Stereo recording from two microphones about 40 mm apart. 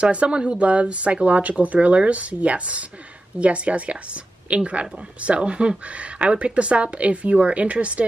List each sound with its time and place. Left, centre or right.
0.0 s speech: right